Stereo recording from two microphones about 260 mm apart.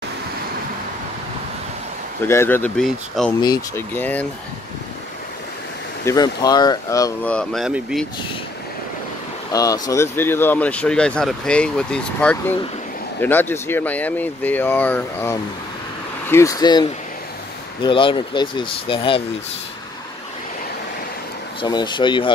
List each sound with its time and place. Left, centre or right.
2.2 s speech: centre
6.0 s speech: centre
9.5 s speech: centre
21.5 s speech: centre